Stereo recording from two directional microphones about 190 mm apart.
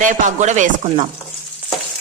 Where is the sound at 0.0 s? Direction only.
40° right (ahead or behind).